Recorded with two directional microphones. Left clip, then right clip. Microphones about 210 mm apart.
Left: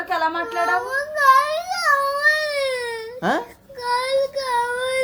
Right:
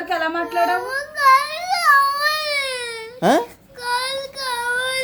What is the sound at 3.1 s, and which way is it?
Babbling, 35° right (ahead or behind).